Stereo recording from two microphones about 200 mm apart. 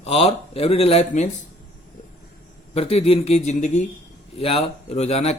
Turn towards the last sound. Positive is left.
turn(degrees=30)  # may be behind; listen again after turning